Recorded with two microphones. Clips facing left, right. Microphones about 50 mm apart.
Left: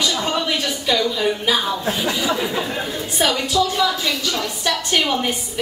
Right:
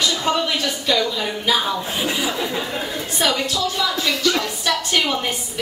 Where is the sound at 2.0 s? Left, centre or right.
Centre.